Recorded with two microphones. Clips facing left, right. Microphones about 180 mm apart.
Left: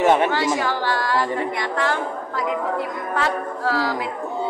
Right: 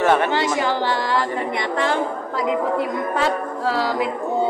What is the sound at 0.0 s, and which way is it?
Speech, 15° left (ahead or behind).